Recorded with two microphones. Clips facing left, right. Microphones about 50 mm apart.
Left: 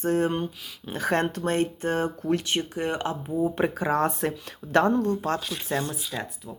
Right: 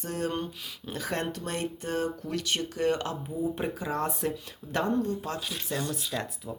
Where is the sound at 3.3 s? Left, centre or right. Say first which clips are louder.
Left 7 dB; left.